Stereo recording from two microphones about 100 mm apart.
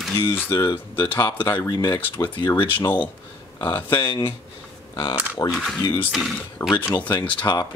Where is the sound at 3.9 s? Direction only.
60° left (ahead or behind).